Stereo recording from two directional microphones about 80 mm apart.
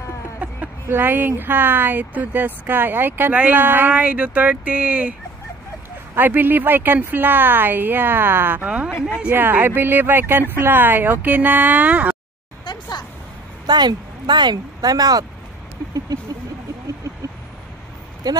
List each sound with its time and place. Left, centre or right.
0.4 s speech: right
6.1 s speech: right
8.6 s speech: centre
9.3 s speech: right
12.7 s a sound: left
13.7 s speech: right
16.1 s vehicle: right
18.3 s speech: right